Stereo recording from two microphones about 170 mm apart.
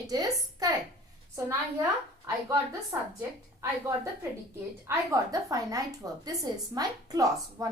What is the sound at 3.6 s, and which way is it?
A woman's voice, 15° right (ahead or behind).